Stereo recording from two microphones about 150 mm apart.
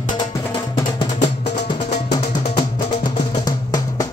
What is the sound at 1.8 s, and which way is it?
Music, 50° left (ahead or behind).